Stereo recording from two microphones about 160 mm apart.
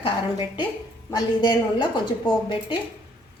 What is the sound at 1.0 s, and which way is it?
Speech, 25° left (ahead or behind).